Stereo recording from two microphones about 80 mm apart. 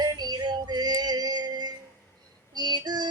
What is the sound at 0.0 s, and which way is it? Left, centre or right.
Music, right.